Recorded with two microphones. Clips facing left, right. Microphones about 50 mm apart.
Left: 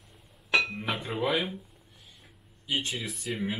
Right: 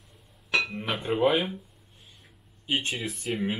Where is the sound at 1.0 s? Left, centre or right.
Right.